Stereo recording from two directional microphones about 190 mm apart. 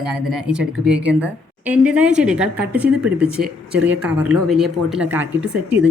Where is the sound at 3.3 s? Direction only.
55° right (ahead or behind).